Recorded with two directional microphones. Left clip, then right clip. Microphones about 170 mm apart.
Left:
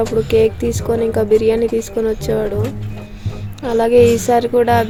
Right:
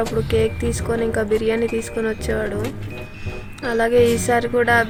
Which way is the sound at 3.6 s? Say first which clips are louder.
Left 5 dB; 20° left (ahead or behind).